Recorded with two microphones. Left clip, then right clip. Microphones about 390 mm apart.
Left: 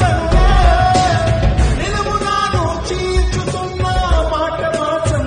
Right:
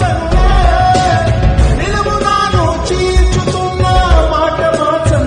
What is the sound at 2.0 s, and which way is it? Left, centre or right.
Music, right.